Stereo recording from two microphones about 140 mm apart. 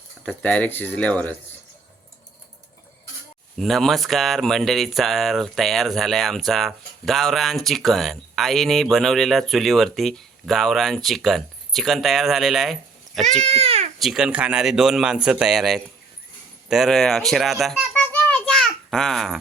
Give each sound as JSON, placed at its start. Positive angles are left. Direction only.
{"t": 0.3, "sound": "speech", "side_deg": 10}
{"t": 3.6, "sound": "speech", "side_deg": 0}
{"t": 13.4, "sound": "speech", "side_deg": -45}
{"t": 14.0, "sound": "speech", "side_deg": -5}
{"t": 18.1, "sound": "a sound", "side_deg": 5}